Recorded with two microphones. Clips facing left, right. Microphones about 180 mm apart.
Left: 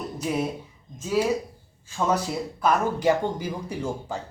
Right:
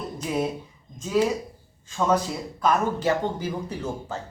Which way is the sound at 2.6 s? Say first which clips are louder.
Right 1 dB; 15° left (ahead or behind).